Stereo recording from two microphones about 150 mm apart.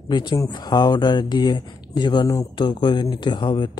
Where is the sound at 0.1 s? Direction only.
30° left (ahead or behind).